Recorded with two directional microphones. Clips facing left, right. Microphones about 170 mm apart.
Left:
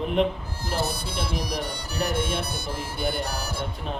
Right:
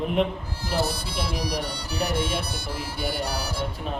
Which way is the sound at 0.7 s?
50° left (ahead or behind).